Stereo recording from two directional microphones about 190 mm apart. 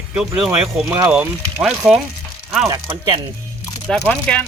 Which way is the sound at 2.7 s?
25° right (ahead or behind).